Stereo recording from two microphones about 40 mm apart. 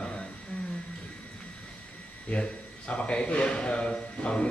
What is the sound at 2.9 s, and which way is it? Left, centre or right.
Speech, left.